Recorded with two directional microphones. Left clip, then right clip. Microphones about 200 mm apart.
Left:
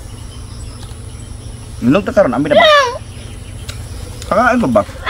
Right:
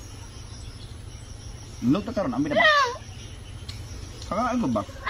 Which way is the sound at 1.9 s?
10° left (ahead or behind).